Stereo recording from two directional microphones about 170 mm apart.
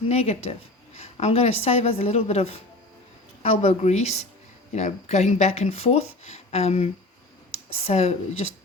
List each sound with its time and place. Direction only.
0.1 s speech: 35° left (ahead or behind)
0.9 s a sound: 40° left (ahead or behind)
1.6 s speech: 35° left (ahead or behind)